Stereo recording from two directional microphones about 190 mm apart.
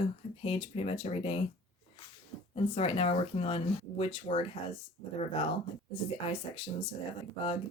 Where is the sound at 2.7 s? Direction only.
30° left (ahead or behind).